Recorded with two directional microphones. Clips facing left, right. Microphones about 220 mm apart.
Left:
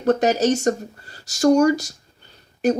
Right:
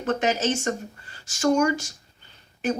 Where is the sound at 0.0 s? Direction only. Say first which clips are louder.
Left 6 dB; 40° left (ahead or behind).